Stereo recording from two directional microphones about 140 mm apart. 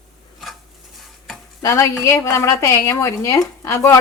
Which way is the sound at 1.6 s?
20° left (ahead or behind).